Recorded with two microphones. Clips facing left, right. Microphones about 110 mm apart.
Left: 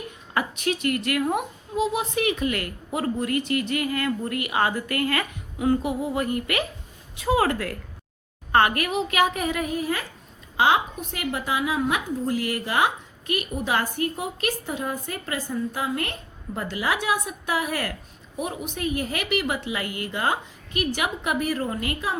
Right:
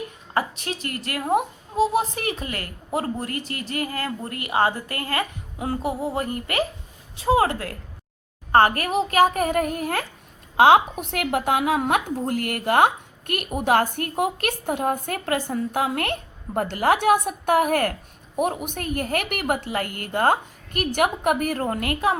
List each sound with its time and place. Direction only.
0.3 s a woman's voice: 35° right (ahead or behind); by 22.2 s 55° right (ahead or behind)